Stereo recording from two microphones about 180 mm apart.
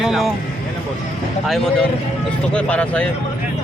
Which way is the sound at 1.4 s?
Centre (ahead or behind).